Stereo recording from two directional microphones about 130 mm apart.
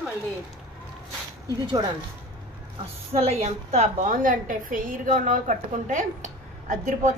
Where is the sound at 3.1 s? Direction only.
50° right (ahead or behind).